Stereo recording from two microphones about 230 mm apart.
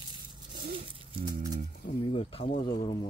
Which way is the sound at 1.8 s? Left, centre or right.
Left.